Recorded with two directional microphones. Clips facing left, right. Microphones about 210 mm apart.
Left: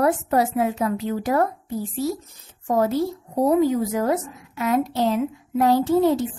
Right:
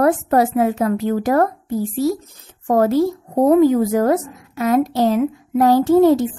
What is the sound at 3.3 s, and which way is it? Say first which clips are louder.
A woman's voice: right 6 dB; 50° right (ahead or behind).